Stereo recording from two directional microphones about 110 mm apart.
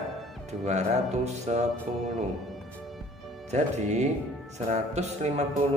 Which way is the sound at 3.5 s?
90° right.